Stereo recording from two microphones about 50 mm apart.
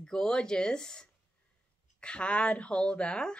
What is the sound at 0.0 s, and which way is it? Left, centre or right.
A woman's voice, centre.